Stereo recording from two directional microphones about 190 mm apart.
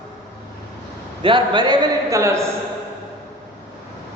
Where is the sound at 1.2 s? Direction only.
25° right (ahead or behind).